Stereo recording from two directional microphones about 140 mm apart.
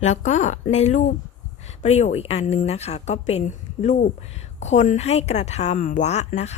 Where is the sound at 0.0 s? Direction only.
55° left (ahead or behind).